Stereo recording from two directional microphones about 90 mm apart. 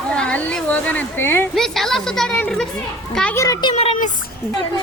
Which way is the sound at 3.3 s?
35° left (ahead or behind).